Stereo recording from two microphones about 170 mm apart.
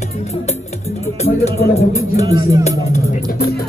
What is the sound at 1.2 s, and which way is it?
Speech, 40° left (ahead or behind).